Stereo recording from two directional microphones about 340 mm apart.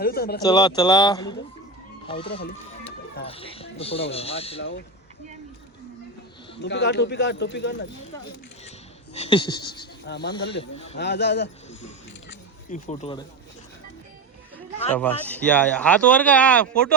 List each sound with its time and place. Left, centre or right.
0.0 s speech: left
0.4 s speech: centre
6.6 s speech: left
9.1 s speech: centre
10.1 s speech: left
10.6 s speech: centre
10.9 s speech: left
12.7 s speech: centre
14.9 s speech: centre